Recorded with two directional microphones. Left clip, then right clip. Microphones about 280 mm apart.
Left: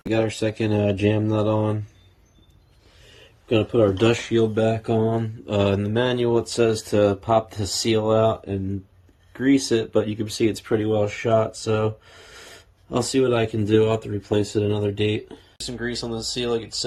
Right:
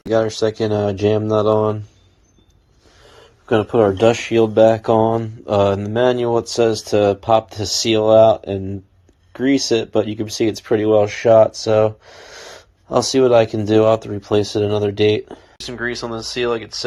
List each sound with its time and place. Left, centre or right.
0.0 s speech: centre
3.9 s speech: centre
15.6 s speech: right